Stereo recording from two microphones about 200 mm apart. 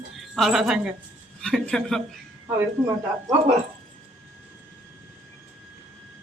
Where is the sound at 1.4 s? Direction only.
5° left (ahead or behind).